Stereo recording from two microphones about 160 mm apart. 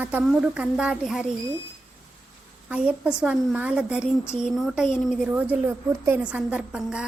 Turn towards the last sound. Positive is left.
turn(degrees=-5)  # may be behind; listen again after turning